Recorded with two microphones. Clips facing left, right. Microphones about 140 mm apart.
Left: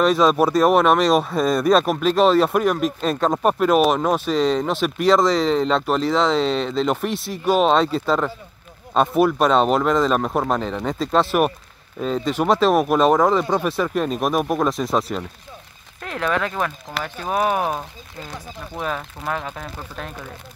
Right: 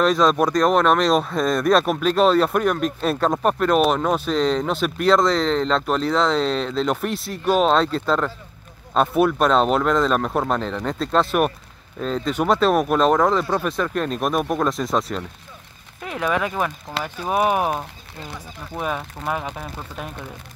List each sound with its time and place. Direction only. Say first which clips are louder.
0.0 s speech: left 1 dB; 5° left (ahead or behind)
13.4 s speech: left 2 dB; 20° left (ahead or behind)
13.7 s speech: left 2 dB; 5° left (ahead or behind)